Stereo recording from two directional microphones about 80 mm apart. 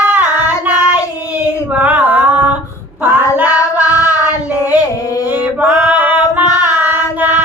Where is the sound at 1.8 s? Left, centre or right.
Centre.